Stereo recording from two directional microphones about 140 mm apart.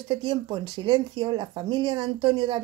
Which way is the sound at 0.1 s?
30° right (ahead or behind).